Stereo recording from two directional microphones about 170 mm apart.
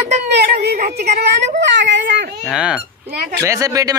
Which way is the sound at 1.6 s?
90° right.